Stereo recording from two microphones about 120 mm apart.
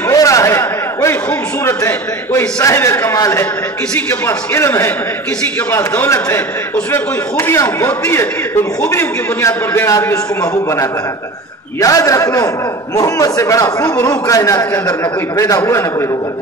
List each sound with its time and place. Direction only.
0.1 s a sound: 30° left (ahead or behind)
1.6 s a man's voice: 20° left (ahead or behind)
5.9 s a man's voice: 20° left (ahead or behind)